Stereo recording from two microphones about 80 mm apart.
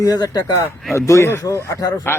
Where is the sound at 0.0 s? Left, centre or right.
Left.